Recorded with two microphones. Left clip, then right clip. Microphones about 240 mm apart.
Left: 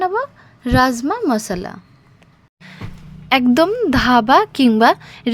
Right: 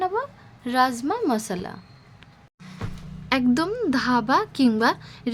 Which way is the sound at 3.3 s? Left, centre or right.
Left.